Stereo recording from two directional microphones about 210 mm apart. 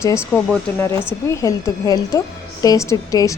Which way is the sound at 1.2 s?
15° left (ahead or behind).